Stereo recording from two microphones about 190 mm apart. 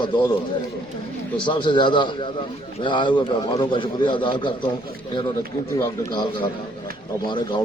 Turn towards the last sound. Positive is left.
turn(degrees=25)  # may be behind; listen again after turning